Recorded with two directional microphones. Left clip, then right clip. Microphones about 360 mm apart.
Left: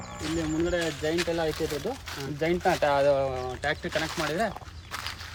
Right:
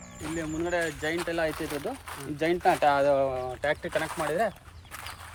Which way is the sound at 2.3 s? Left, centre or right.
Right.